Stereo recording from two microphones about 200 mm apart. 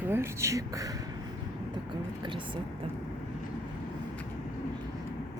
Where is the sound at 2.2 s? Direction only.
25° right (ahead or behind).